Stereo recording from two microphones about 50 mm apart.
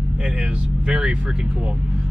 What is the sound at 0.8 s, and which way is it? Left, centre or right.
Speech, right.